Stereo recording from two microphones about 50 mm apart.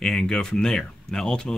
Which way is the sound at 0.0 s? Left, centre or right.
Centre.